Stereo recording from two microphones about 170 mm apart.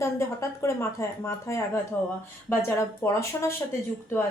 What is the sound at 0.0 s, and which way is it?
A woman's voice, 15° left (ahead or behind).